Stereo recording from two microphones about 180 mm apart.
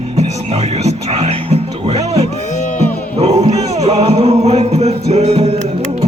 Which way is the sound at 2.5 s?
45° left (ahead or behind).